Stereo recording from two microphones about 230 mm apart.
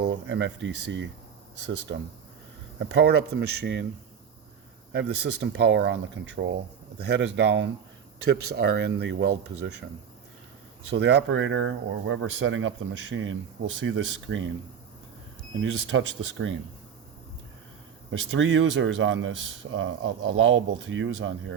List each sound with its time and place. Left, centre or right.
0.0 s speech: right
4.9 s speech: right
10.8 s speech: right
15.6 s speech: right
18.1 s speech: right